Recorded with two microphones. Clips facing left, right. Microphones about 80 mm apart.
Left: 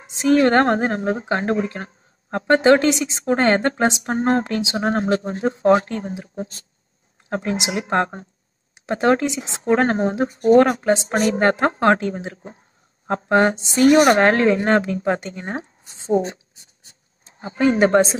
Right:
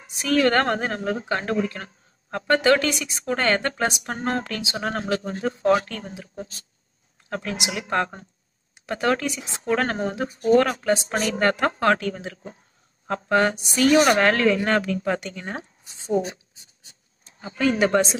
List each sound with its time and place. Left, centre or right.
0.0 s a woman's voice: left